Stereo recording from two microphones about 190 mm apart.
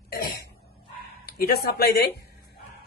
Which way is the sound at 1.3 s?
55° left (ahead or behind).